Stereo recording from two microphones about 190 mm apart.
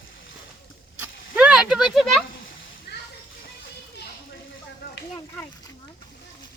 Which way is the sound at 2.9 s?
60° left (ahead or behind).